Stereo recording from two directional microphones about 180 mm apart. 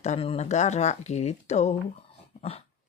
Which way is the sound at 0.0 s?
35° left (ahead or behind).